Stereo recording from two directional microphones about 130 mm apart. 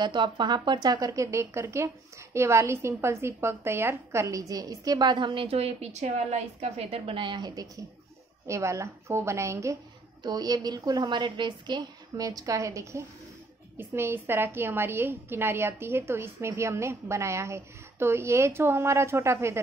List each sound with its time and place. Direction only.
0.0 s a woman's voice: 35° right (ahead or behind); by 19.6 s 20° right (ahead or behind)